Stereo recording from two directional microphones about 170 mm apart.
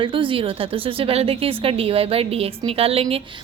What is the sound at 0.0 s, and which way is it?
A woman's voice, 30° right (ahead or behind).